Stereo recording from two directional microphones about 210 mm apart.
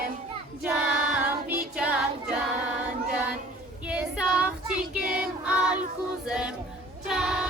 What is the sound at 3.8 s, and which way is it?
Female singing, 5° right (ahead or behind).